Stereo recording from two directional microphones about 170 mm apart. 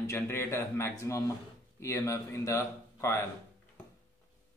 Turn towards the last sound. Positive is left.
turn(degrees=15)  # may be behind; listen again after turning